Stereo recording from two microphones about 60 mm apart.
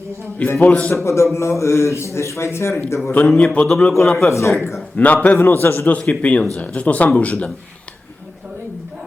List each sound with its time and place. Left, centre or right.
0.6 s speech: left
0.9 s speech: left
3.0 s a man's voice: left
3.3 s a sound: centre
4.0 s a man's voice: centre
4.3 s speech: left
4.9 s a man's voice: left
6.0 s a sound: centre
6.6 s speech: left